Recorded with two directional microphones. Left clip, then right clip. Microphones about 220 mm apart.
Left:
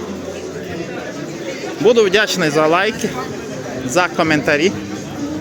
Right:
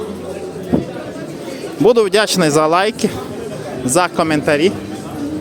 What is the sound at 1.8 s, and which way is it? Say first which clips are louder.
A man's voice: right 1 dB; 30° right (ahead or behind).